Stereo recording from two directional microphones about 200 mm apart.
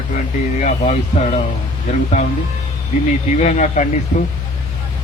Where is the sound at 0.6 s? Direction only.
35° left (ahead or behind).